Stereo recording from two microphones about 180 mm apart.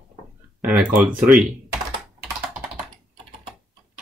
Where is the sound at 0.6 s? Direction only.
10° right (ahead or behind).